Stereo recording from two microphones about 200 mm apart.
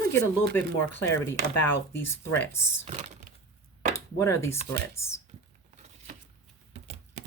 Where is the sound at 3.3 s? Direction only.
45° right (ahead or behind).